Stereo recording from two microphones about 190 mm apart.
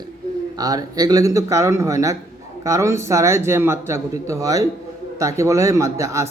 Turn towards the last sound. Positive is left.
turn(degrees=-15)  # may be behind; listen again after turning